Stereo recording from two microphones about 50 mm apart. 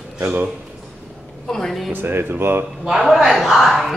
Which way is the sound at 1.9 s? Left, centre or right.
Right.